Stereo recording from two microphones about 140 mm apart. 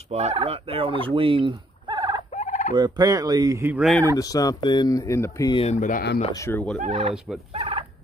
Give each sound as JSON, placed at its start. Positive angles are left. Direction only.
{"t": 0.1, "sound": "fowl", "side_deg": -55}
{"t": 2.3, "sound": "fowl", "side_deg": 60}
{"t": 2.7, "sound": "speech", "side_deg": -30}
{"t": 4.2, "sound": "speech", "side_deg": 25}
{"t": 5.7, "sound": "speech", "side_deg": 65}
{"t": 6.3, "sound": "speech", "side_deg": 20}
{"t": 6.8, "sound": "turkey", "side_deg": -55}
{"t": 7.5, "sound": "fowl", "side_deg": -40}